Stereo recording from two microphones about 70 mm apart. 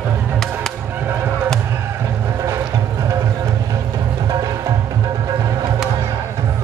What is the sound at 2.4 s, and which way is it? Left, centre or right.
Music, right.